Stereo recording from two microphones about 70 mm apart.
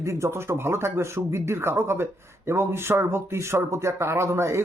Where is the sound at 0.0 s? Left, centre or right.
Right.